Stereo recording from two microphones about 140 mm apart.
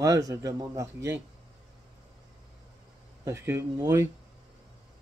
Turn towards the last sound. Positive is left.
turn(degrees=-25)  # may be behind; listen again after turning